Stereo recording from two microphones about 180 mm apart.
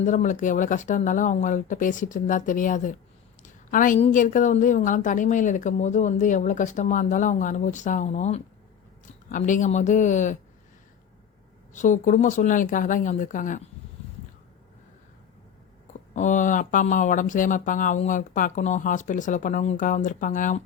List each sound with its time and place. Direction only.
0.0 s speech: 45° left (ahead or behind)
3.4 s a sound: 50° left (ahead or behind)
4.0 s speech: 45° left (ahead or behind)
11.7 s speech: 45° left (ahead or behind)
15.9 s speech: 45° left (ahead or behind)